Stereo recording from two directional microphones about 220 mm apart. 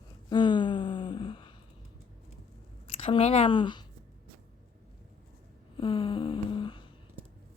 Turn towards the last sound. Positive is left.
turn(degrees=20)  # may be behind; listen again after turning